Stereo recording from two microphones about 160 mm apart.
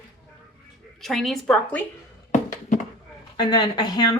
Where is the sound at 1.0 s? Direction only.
Centre (ahead or behind).